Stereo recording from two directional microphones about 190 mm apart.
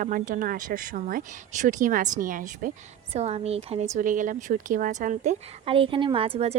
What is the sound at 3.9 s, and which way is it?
Speech, 45° right (ahead or behind).